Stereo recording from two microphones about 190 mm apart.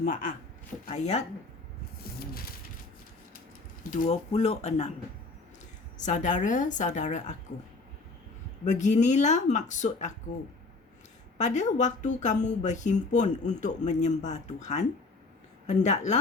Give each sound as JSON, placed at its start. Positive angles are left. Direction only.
{"t": 0.0, "sound": "speech", "side_deg": 45}
{"t": 3.9, "sound": "speech", "side_deg": 40}
{"t": 6.0, "sound": "speech", "side_deg": 40}
{"t": 8.6, "sound": "speech", "side_deg": 40}
{"t": 11.3, "sound": "speech", "side_deg": 40}